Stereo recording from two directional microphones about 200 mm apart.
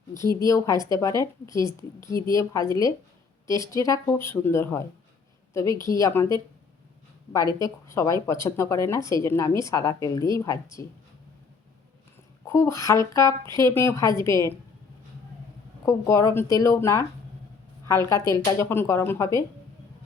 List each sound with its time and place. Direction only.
0.4 s a woman's voice: 15° left (ahead or behind)
7.6 s a woman's voice: 15° left (ahead or behind)
12.5 s a woman's voice: 15° left (ahead or behind)
15.9 s a woman's voice: 15° left (ahead or behind)
18.3 s a woman's voice: 15° left (ahead or behind)